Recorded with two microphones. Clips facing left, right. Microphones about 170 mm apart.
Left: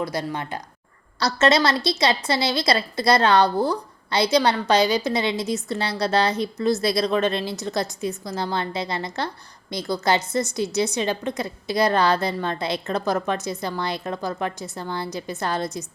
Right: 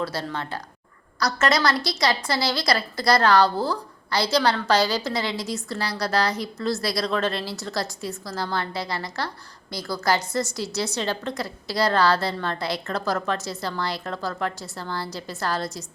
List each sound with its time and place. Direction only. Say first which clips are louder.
0.0 s a woman's voice: left 2 dB; 15° left (ahead or behind)